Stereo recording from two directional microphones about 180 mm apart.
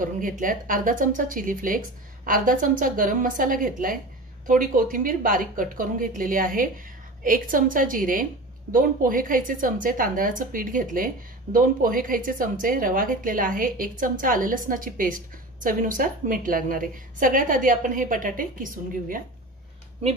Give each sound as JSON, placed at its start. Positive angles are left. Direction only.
{"t": 0.0, "sound": "a woman's voice", "side_deg": -50}